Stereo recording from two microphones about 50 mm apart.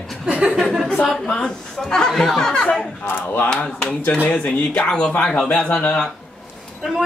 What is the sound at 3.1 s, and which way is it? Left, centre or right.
Speech, left.